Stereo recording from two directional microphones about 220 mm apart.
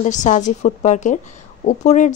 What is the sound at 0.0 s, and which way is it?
A woman's voice, 35° left (ahead or behind).